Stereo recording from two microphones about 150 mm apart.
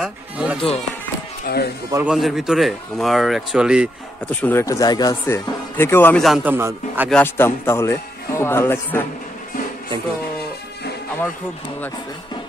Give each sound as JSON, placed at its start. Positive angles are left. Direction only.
{"t": 0.0, "sound": "speech", "side_deg": -10}
{"t": 1.4, "sound": "speech", "side_deg": 90}
{"t": 2.0, "sound": "speech", "side_deg": 0}
{"t": 4.3, "sound": "speech", "side_deg": 10}
{"t": 6.2, "sound": "speech", "side_deg": -5}
{"t": 6.5, "sound": "speech", "side_deg": -15}
{"t": 7.1, "sound": "speech", "side_deg": 10}